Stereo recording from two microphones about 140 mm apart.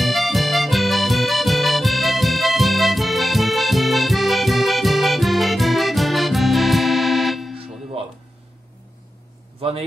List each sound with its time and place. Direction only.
0.0 s music: centre (ahead or behind)
7.5 s music: 45° right (ahead or behind)
9.6 s a sound: 45° right (ahead or behind)